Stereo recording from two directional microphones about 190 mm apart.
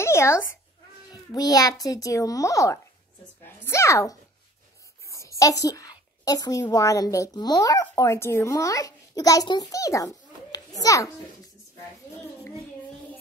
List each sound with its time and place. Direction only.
0.0 s a sound: 15° left (ahead or behind)
1.1 s a child's voice: 20° left (ahead or behind)
5.4 s a woman's voice: 15° left (ahead or behind)